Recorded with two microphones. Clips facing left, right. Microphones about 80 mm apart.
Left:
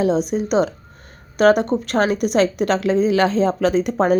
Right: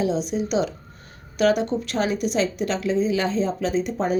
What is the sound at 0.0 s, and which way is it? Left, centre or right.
A woman's voice, left.